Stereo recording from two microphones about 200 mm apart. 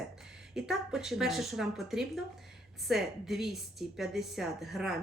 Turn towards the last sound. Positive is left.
turn(degrees=0)  # may be behind; listen again after turning